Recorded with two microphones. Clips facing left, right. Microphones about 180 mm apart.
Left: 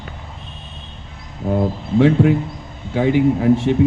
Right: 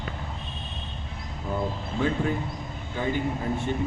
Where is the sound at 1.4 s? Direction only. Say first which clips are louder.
Left 10 dB; 70° left (ahead or behind).